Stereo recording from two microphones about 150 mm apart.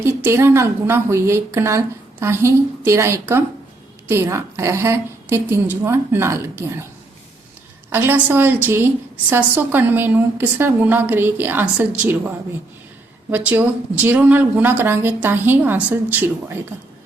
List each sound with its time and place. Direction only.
0.0 s speech: 15° right (ahead or behind)
7.9 s speech: 15° right (ahead or behind)
13.3 s speech: 10° right (ahead or behind)